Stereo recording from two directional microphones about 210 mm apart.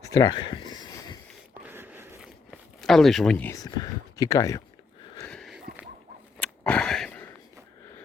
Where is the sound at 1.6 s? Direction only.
10° right (ahead or behind); by 4.6 s 15° left (ahead or behind).